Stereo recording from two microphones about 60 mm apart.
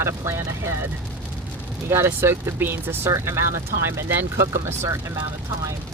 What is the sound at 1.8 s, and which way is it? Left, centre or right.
Speech, right.